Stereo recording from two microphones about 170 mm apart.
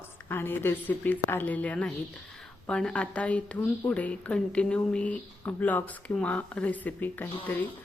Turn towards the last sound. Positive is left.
turn(degrees=10)  # may be behind; listen again after turning